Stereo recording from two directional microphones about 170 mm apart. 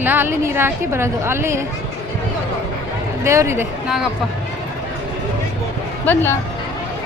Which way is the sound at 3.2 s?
15° right (ahead or behind).